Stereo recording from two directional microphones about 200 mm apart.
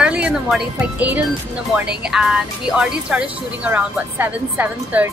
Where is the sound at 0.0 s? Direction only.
5° right (ahead or behind).